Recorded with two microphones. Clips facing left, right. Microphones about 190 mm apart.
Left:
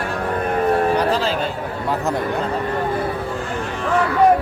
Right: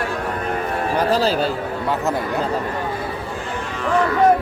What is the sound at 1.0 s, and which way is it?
Speech, 40° right (ahead or behind).